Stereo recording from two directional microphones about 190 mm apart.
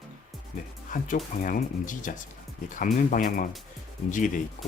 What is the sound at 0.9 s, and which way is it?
Speech, 45° left (ahead or behind).